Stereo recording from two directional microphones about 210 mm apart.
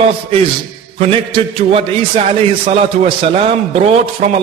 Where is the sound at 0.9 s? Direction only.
25° right (ahead or behind).